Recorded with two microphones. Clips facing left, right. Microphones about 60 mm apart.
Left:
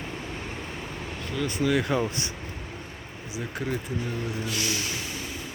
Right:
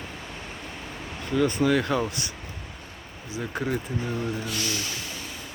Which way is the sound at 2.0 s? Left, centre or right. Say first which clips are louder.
Left 1 dB; left.